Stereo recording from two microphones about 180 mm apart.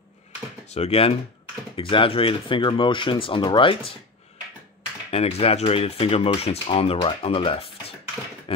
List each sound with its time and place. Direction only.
0.7 s speech: 35° left (ahead or behind)
5.1 s speech: 35° left (ahead or behind)
8.5 s a sound: 30° left (ahead or behind)